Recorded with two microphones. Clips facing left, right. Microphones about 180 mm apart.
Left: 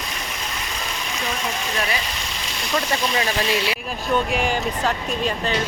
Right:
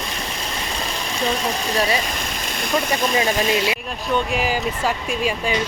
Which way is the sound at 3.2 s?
20° right (ahead or behind).